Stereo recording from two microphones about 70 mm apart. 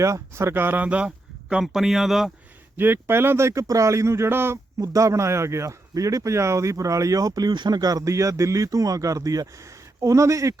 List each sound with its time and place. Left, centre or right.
0.0 s speech: right
0.9 s a sound: centre
1.6 s speech: centre
2.7 s speech: right
4.8 s speech: right
5.9 s speech: right
10.0 s speech: right